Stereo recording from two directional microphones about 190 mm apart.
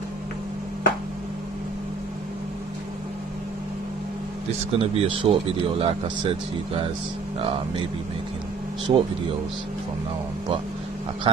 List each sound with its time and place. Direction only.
4.7 s speech: 30° right (ahead or behind)
8.9 s speech: 25° right (ahead or behind)
11.3 s speech: 30° right (ahead or behind)